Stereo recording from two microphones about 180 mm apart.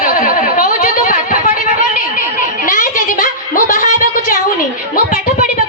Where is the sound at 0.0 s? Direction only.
50° left (ahead or behind).